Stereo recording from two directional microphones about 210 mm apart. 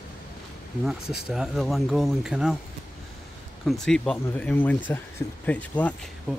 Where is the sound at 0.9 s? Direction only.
Centre (ahead or behind).